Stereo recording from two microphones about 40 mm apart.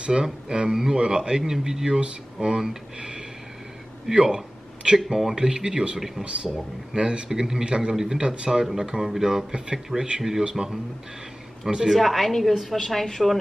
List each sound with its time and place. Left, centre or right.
0.0 s a man's voice: centre
5.9 s a man's voice: centre
6.9 s a man's voice: right
12.0 s a woman's voice: centre